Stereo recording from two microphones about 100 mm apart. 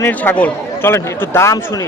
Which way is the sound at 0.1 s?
15° left (ahead or behind).